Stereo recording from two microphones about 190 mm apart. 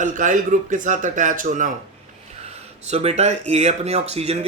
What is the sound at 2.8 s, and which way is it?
Speech, 35° right (ahead or behind).